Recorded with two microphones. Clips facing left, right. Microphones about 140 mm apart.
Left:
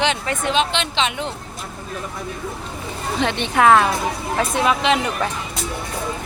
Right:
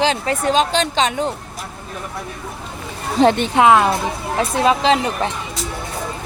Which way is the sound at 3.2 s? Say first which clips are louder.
Right 9 dB; 40° right (ahead or behind).